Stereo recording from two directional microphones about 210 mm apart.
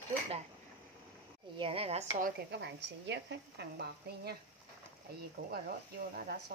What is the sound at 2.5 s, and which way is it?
Speech, 55° right (ahead or behind).